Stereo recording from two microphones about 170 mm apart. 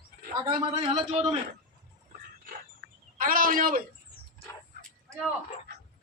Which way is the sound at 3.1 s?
55° right (ahead or behind).